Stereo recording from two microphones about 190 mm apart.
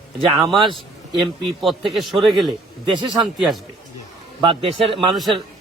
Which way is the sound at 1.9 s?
Centre (ahead or behind).